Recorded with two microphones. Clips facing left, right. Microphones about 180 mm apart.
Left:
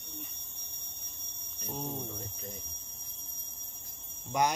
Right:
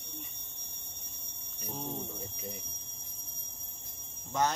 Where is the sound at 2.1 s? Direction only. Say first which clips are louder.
Right 1 dB; 10° right (ahead or behind).